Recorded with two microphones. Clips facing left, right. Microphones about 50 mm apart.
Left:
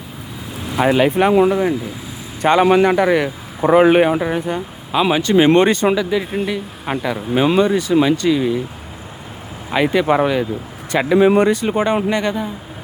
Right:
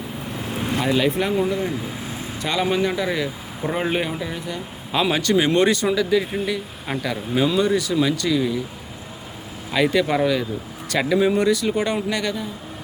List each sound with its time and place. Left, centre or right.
0.8 s speech: left
1.5 s a man's voice: left
4.9 s speech: centre; by 6.0 s left
6.0 s speech: centre
7.6 s speech: left
9.7 s speech: left
11.3 s speech: left